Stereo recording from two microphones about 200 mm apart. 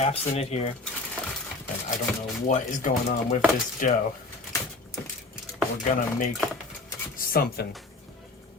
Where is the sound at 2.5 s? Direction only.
40° left (ahead or behind).